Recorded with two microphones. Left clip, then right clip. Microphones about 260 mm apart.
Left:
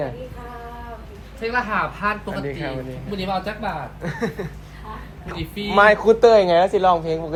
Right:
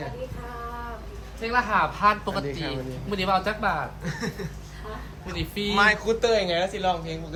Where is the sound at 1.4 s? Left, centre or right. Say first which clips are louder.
Left 1 dB; right.